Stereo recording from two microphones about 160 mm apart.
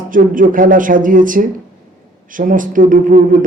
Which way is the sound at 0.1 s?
55° right (ahead or behind).